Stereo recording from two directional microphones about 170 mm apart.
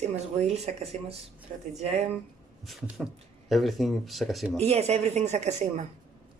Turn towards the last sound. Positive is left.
turn(degrees=-40)  # may be behind; listen again after turning